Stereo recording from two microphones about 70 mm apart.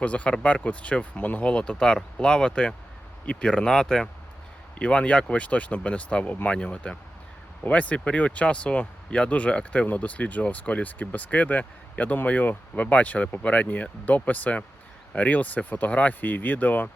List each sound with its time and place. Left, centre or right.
0.0 s speech: centre